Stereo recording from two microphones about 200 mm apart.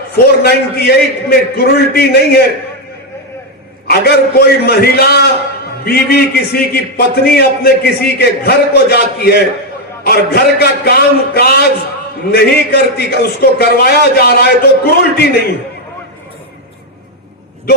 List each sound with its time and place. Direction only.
0.4 s a man's voice: 50° left (ahead or behind)
3.8 s a man's voice: 50° left (ahead or behind)